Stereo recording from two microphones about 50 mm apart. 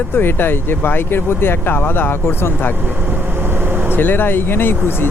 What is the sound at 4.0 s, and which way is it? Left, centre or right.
Speech, left.